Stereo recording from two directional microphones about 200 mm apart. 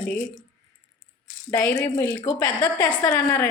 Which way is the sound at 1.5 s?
10° left (ahead or behind).